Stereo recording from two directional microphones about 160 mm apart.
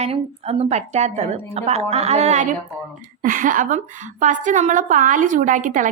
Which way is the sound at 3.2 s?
55° right (ahead or behind).